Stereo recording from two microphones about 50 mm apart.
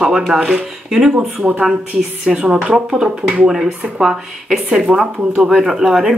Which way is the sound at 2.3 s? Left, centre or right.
Centre.